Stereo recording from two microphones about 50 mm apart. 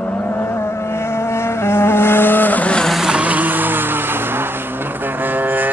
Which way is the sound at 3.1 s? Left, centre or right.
Right.